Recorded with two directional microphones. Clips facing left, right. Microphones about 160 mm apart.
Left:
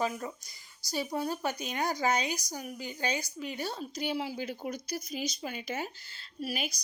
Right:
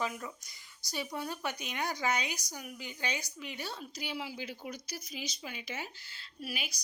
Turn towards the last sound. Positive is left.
turn(degrees=40)  # may be behind; listen again after turning